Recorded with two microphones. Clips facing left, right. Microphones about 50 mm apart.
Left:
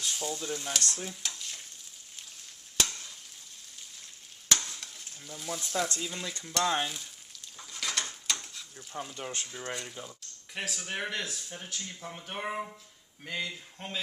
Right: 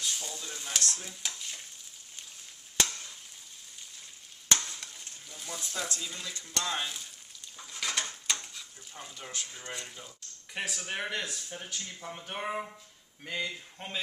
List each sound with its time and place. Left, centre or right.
0.0 s stir: centre
2.7 s frying: centre
4.4 s stir: centre
6.4 s speech: centre
7.6 s a sound: centre
8.9 s stir: centre
9.7 s speech: centre